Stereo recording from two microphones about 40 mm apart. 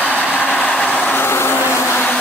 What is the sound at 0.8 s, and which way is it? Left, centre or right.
Vehicle, left.